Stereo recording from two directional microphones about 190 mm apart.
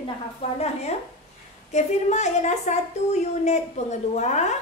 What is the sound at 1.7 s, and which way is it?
A woman's voice, 35° left (ahead or behind).